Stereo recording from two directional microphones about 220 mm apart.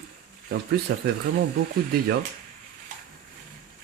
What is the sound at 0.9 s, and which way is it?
Speech, 45° right (ahead or behind).